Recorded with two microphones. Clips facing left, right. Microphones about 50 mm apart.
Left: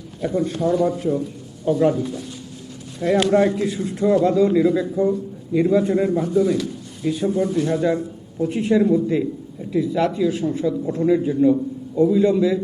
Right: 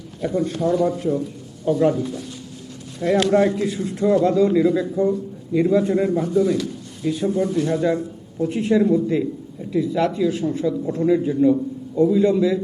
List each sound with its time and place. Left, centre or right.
0.2 s a man's voice: centre